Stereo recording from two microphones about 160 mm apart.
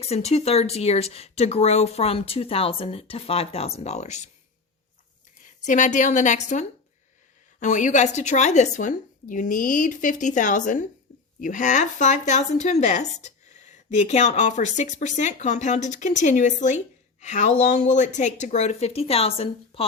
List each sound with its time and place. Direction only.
0.0 s speech: 40° left (ahead or behind)
5.5 s a woman's voice: 50° left (ahead or behind)